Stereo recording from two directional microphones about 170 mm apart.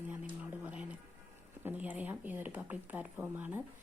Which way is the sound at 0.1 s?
10° right (ahead or behind).